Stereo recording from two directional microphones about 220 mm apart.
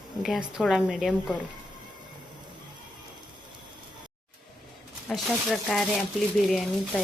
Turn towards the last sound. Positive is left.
turn(degrees=0)  # may be behind; listen again after turning